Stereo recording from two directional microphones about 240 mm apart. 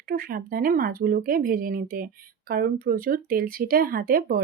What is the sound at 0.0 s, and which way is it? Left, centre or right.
Speech, right.